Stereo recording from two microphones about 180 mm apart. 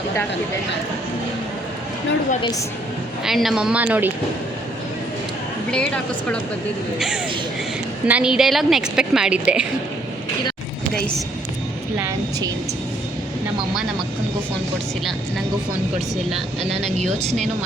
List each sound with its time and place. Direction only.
2.4 s a woman's voice: 20° left (ahead or behind)
3.2 s a woman's voice: centre (ahead or behind)
5.7 s a woman's voice: 5° left (ahead or behind)
8.0 s a woman's voice: 5° right (ahead or behind)
11.9 s a woman's voice: 15° right (ahead or behind)
17.2 s speech: 40° right (ahead or behind)